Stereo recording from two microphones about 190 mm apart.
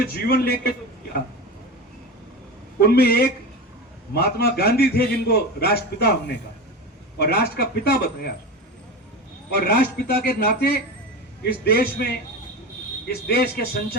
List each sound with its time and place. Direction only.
0.0 s a man's voice: 55° left (ahead or behind)
2.8 s a man's voice: 55° left (ahead or behind)
7.2 s a man's voice: 55° left (ahead or behind)
9.6 s a man's voice: 55° left (ahead or behind)